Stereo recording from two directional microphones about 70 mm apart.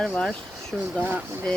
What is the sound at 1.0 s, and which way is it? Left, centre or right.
Speech, right.